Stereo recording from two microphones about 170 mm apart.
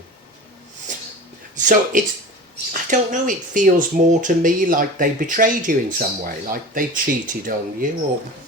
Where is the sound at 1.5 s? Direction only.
45° right (ahead or behind).